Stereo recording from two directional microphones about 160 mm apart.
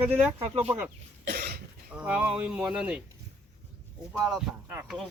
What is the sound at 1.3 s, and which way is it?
Cough, 75° right (ahead or behind).